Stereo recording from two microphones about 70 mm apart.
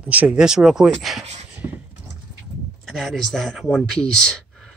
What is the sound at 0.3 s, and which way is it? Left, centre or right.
Speech, centre.